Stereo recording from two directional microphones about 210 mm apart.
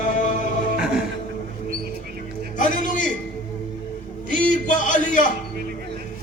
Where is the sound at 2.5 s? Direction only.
35° left (ahead or behind).